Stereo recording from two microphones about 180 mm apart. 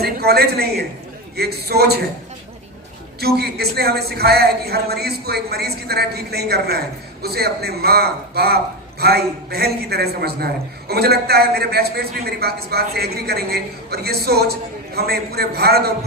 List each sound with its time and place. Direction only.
0.0 s a woman's voice: 60° right (ahead or behind)
3.2 s speech: 60° right (ahead or behind)